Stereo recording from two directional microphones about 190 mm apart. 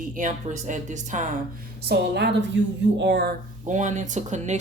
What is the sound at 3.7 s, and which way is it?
Speech, 40° right (ahead or behind).